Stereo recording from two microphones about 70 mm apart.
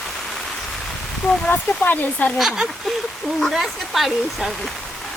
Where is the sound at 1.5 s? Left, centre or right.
Left.